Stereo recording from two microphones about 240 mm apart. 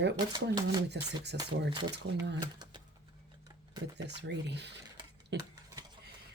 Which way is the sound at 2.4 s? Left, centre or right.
Centre.